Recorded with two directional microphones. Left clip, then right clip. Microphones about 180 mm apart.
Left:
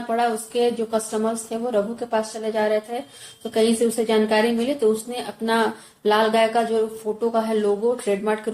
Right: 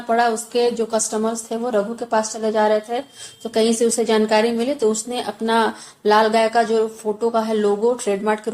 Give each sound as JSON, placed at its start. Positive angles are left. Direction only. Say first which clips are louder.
{"t": 0.1, "sound": "speech", "louder": "right 4 dB", "side_deg": -35}